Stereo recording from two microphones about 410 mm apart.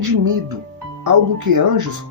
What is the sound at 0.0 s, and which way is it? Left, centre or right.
Speech, right.